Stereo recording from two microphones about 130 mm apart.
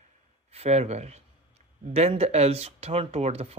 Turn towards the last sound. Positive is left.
turn(degrees=-50)  # may be behind; listen again after turning